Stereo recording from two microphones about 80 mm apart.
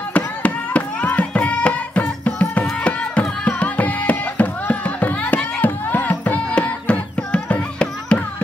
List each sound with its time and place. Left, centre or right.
0.1 s music: centre